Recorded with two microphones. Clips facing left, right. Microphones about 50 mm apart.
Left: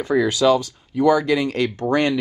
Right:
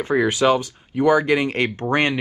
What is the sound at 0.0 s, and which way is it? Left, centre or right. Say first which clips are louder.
Speech: even; right.